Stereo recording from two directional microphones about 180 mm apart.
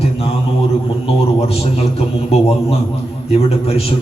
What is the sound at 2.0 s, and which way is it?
A man's voice, 35° left (ahead or behind).